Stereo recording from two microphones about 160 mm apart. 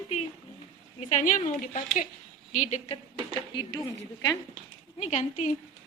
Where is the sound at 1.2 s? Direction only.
50° left (ahead or behind).